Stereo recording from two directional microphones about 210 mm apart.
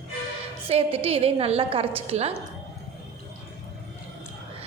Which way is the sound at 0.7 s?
25° right (ahead or behind).